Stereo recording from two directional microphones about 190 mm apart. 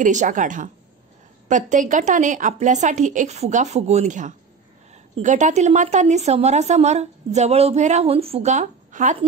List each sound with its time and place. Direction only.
0.0 s a woman's voice: 40° right (ahead or behind)